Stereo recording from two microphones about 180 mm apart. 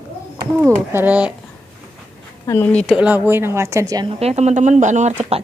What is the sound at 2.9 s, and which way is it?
A woman's voice, 10° right (ahead or behind).